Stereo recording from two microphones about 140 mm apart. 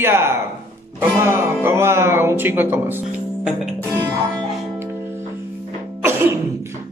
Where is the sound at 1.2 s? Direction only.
15° right (ahead or behind).